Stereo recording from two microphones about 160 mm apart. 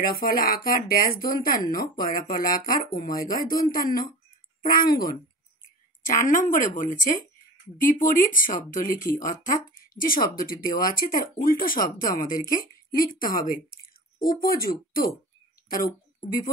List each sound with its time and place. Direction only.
0.0 s speech: 65° left (ahead or behind)
6.0 s speech: 55° left (ahead or behind)